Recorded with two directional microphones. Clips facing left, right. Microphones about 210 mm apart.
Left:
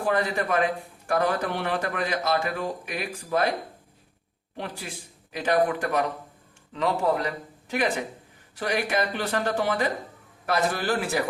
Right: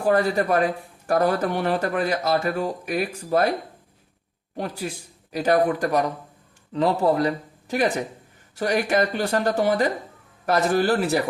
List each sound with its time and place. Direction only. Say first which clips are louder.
0.0 s a man's voice: right 5 dB; 40° right (ahead or behind)
4.5 s a man's voice: right 6 dB; 40° right (ahead or behind)